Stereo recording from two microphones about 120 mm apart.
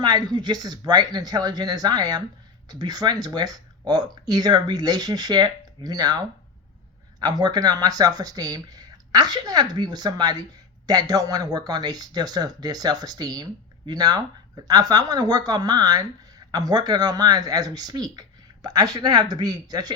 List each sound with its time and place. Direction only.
0.0 s speech: 35° right (ahead or behind)